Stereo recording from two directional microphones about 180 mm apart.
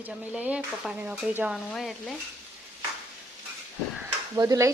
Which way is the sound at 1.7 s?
Centre (ahead or behind).